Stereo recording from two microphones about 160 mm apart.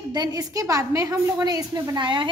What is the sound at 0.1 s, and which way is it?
A woman's voice, 25° right (ahead or behind).